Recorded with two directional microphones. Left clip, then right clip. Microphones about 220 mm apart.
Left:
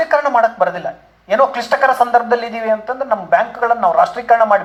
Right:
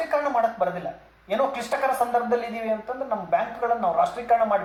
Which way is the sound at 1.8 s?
45° left (ahead or behind).